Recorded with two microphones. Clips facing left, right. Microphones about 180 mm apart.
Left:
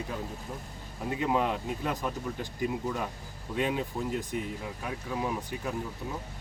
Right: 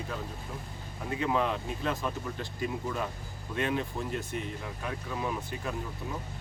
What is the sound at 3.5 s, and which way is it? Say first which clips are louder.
Speech: left 1 dB; 15° left (ahead or behind).